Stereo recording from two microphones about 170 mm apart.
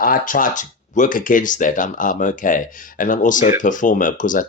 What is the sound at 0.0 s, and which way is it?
Speech, 55° left (ahead or behind).